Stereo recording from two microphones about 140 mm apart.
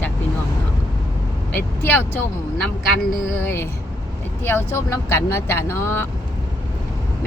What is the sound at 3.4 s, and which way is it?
Speech, 15° left (ahead or behind).